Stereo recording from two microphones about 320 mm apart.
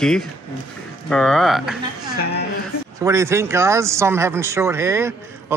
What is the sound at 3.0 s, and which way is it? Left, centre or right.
Speech, centre.